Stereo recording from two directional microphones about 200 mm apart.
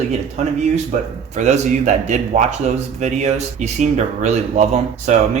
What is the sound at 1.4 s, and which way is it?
Speech, 35° right (ahead or behind).